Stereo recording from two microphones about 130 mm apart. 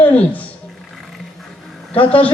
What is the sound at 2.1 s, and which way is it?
Speech, 10° left (ahead or behind).